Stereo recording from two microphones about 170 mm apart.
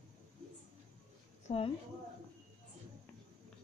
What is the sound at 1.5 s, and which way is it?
Speech, 35° left (ahead or behind).